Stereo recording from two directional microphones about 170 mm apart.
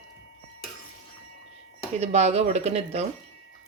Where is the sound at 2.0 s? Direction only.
40° right (ahead or behind).